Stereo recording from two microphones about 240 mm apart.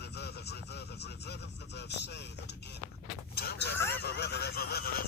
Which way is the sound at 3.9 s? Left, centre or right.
Left.